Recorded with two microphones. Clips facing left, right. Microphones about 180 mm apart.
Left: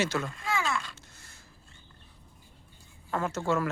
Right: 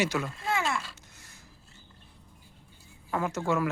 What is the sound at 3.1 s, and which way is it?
Speech, 15° right (ahead or behind).